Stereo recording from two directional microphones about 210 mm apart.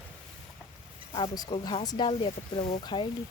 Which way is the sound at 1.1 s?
20° left (ahead or behind).